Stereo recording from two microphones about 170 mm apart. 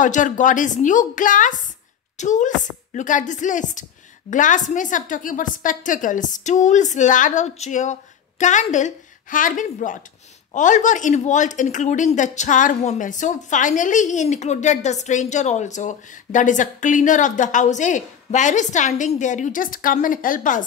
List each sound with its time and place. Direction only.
0.0 s a woman's voice: 50° left (ahead or behind)